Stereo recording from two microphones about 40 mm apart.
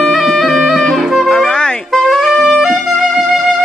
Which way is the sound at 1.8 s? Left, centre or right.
Centre.